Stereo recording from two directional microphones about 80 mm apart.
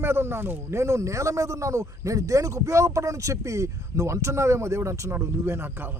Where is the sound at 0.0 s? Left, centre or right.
Right.